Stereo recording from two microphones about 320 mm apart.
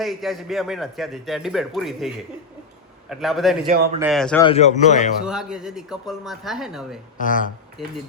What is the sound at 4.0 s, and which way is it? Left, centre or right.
Speech, centre.